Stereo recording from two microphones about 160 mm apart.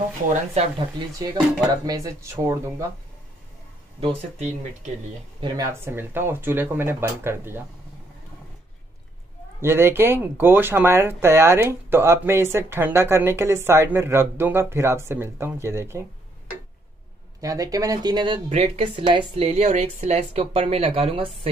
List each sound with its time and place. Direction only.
0.7 s speech: 30° right (ahead or behind)
4.0 s speech: 40° right (ahead or behind)
5.4 s speech: 20° right (ahead or behind)
9.6 s speech: 15° right (ahead or behind)
17.4 s speech: 20° right (ahead or behind)
18.5 s a woman's voice: 40° right (ahead or behind)